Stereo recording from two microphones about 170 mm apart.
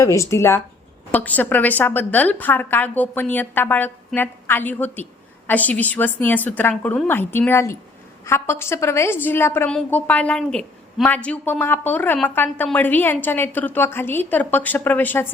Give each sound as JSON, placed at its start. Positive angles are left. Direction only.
{"t": 0.0, "sound": "a woman's voice", "side_deg": 15}